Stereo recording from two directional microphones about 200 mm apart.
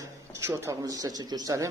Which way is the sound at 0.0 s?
15° right (ahead or behind).